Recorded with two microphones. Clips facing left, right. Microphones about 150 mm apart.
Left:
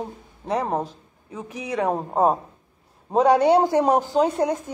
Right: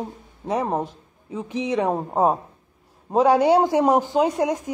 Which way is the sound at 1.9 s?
10° right (ahead or behind).